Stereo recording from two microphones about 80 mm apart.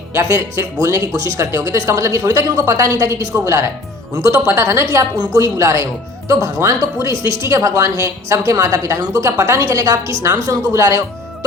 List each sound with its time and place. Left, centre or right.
0.1 s speech: right